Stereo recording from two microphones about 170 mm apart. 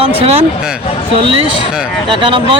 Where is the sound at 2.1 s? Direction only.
30° right (ahead or behind).